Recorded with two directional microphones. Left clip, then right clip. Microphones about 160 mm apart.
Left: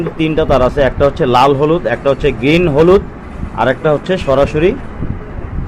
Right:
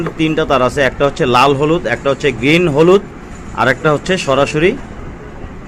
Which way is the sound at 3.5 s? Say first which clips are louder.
Even; 15° right (ahead or behind).